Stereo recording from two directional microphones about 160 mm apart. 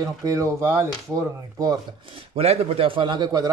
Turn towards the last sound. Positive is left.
turn(degrees=-25)  # may be behind; listen again after turning